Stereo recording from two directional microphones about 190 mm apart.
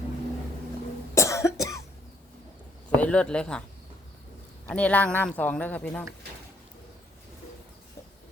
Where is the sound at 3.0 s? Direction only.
5° left (ahead or behind).